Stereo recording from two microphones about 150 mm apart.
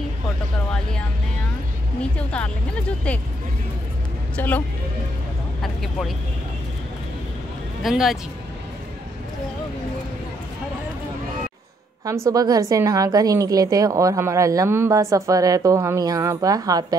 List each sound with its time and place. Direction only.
2.0 s speech: 10° left (ahead or behind)
4.4 s speech: 10° left (ahead or behind)
7.8 s speech: centre (ahead or behind)
12.3 s a woman's voice: 25° right (ahead or behind)